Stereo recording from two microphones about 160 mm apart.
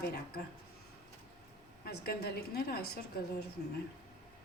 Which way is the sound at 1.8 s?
80° left.